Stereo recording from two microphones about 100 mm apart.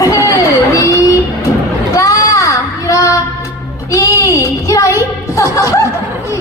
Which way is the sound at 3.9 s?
35° left (ahead or behind).